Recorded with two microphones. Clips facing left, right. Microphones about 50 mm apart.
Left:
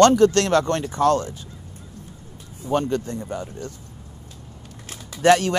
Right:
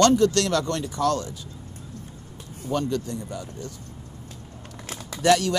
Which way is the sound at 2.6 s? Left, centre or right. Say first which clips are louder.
Left 4 dB; left.